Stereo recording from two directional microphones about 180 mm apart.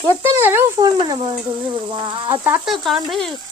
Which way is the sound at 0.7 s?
25° right (ahead or behind).